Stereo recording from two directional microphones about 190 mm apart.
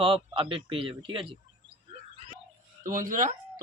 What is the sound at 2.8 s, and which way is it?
Speech, 45° right (ahead or behind).